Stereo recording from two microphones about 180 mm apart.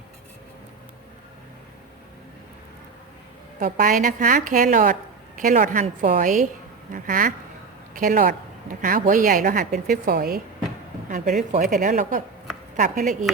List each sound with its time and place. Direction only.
3.6 s a woman's voice: 50° right (ahead or behind)
11.1 s a woman's voice: 45° right (ahead or behind)